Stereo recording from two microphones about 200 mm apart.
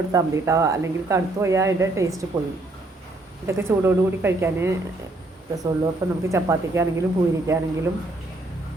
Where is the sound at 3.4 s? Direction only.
10° right (ahead or behind).